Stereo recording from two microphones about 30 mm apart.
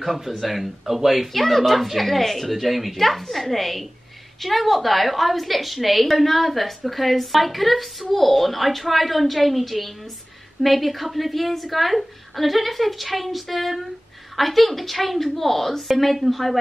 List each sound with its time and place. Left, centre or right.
0.4 s a woman's voice: centre
1.3 s a woman's voice: centre